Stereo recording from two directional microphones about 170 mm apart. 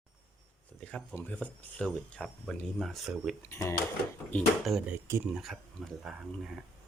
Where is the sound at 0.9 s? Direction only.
5° left (ahead or behind).